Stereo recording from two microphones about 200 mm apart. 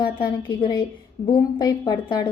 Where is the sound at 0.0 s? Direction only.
25° left (ahead or behind).